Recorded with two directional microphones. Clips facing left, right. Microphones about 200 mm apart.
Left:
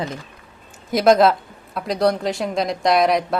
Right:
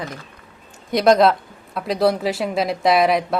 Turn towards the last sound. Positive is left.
turn(degrees=0)  # may be behind; listen again after turning